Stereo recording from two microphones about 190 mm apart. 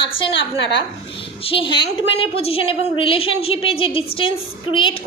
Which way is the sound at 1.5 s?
25° left (ahead or behind).